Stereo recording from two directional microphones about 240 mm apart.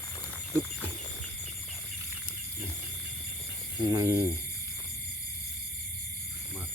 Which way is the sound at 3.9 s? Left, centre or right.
Centre.